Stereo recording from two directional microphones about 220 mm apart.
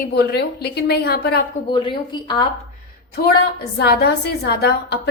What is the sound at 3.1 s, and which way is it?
A woman's voice, 45° left (ahead or behind).